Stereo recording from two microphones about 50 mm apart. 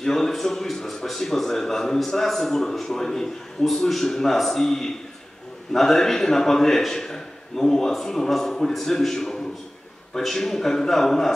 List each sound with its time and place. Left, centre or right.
0.0 s a man's voice: centre